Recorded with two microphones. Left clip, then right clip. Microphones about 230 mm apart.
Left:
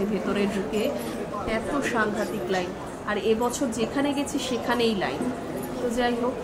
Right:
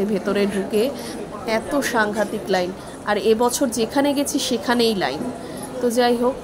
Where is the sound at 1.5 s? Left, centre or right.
Right.